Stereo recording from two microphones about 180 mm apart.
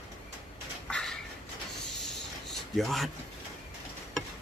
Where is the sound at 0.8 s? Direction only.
5° left (ahead or behind).